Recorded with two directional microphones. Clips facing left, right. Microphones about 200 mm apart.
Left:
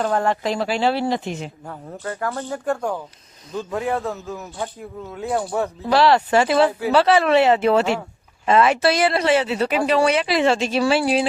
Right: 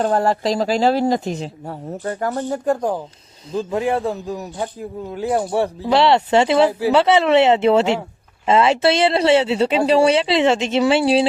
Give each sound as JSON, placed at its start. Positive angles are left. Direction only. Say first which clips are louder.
{"t": 0.0, "sound": "speech", "louder": "right 3 dB", "side_deg": -35}
{"t": 4.5, "sound": "speech", "louder": "right 4 dB", "side_deg": -15}